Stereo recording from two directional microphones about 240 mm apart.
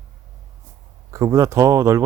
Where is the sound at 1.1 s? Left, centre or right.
Centre.